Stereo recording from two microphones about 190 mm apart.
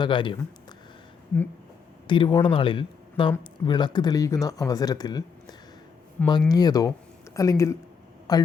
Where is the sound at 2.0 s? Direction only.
25° left (ahead or behind).